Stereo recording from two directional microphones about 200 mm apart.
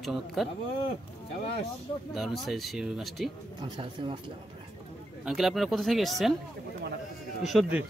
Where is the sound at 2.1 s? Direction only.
Centre (ahead or behind).